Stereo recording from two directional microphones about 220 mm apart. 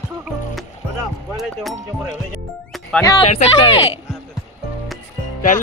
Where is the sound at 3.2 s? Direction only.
30° left (ahead or behind).